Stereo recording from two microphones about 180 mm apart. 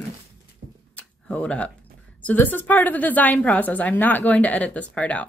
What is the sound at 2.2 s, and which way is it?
A woman's voice, 10° left (ahead or behind).